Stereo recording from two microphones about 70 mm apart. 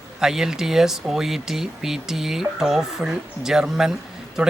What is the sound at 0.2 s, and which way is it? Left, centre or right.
Speech, centre.